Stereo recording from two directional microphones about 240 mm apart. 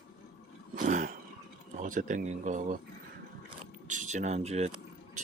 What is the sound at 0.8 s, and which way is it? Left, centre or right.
A man's voice, right.